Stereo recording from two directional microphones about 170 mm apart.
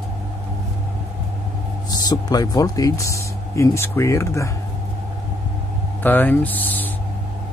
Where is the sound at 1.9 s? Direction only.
20° left (ahead or behind).